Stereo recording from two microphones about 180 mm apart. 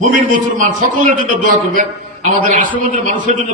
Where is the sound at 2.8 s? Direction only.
45° right (ahead or behind).